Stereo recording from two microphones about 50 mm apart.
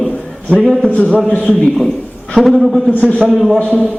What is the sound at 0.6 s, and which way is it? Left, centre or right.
Speech, centre.